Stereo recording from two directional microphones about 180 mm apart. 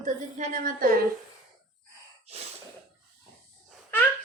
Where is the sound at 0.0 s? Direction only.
45° right (ahead or behind).